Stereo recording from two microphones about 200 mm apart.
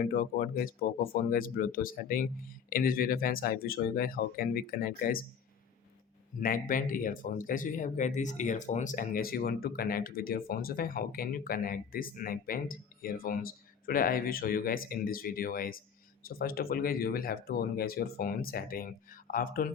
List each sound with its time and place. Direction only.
0.0 s speech: 45° left (ahead or behind)
6.4 s speech: 45° left (ahead or behind)